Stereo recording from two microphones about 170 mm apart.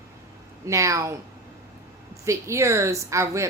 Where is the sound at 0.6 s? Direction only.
20° right (ahead or behind).